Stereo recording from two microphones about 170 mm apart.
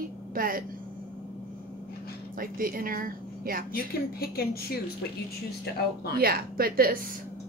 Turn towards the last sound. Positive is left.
turn(degrees=-60)  # may be behind; listen again after turning